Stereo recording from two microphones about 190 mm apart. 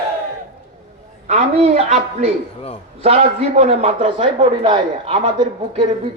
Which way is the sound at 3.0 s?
35° right (ahead or behind).